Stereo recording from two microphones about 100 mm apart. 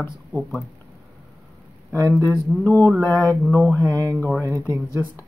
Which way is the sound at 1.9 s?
30° right (ahead or behind).